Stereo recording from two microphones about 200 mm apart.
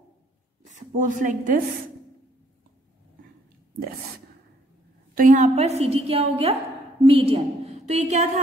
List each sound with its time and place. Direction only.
0.9 s a woman's voice: 40° right (ahead or behind)
5.1 s a woman's voice: 40° right (ahead or behind)